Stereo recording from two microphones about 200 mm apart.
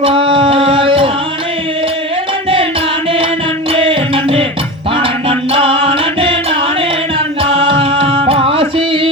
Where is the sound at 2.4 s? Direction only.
25° right (ahead or behind).